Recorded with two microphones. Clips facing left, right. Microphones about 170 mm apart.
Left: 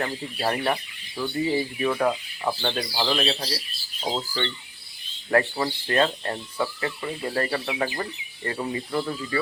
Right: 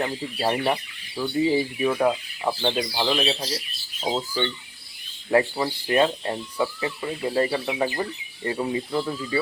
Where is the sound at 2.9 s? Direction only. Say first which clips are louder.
Right 1 dB; centre (ahead or behind).